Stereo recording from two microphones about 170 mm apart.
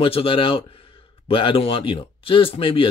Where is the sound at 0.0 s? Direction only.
30° left (ahead or behind).